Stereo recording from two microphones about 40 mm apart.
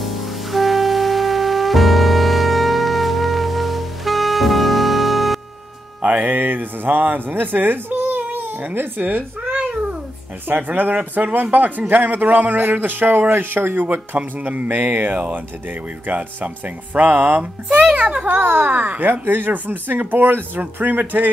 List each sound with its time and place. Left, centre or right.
0.0 s music: centre
6.0 s speech: right
7.9 s babbling: right
9.4 s cat: right
10.5 s speech: right
11.2 s speech: right
11.5 s speech: right
13.3 s speech: right
14.1 s speech: right
17.9 s a sound: right
18.2 s speech: right